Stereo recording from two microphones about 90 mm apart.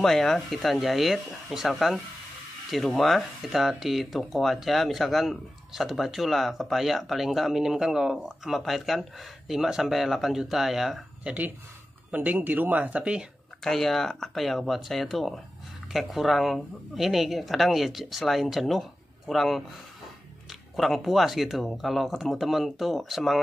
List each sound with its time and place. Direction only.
0.0 s speech: 5° left (ahead or behind)
12.1 s speech: 15° right (ahead or behind)
13.7 s speech: 5° left (ahead or behind)
20.7 s speech: centre (ahead or behind)